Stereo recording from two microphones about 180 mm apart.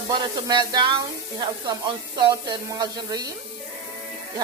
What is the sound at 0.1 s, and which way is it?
Speech, 25° right (ahead or behind).